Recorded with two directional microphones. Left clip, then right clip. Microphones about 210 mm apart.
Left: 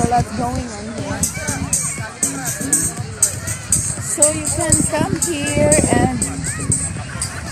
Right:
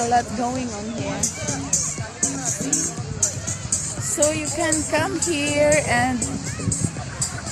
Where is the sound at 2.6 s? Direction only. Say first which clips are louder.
Left 3 dB; 40° left (ahead or behind).